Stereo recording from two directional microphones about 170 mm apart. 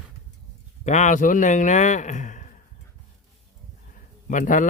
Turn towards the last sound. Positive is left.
turn(degrees=50)  # may be behind; listen again after turning